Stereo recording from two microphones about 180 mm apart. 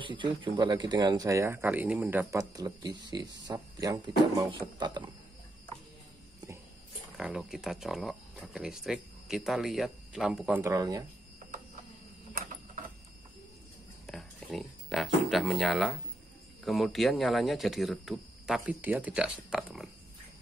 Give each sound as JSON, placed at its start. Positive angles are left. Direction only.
{"t": 0.0, "sound": "speech", "side_deg": -25}
{"t": 7.2, "sound": "speech", "side_deg": -5}
{"t": 10.6, "sound": "speech", "side_deg": -20}
{"t": 14.0, "sound": "speech", "side_deg": 0}